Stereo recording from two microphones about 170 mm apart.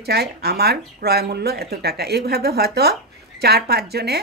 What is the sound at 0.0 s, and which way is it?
Speech, 70° right (ahead or behind).